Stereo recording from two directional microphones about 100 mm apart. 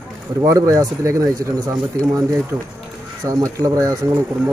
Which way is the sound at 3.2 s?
35° right (ahead or behind).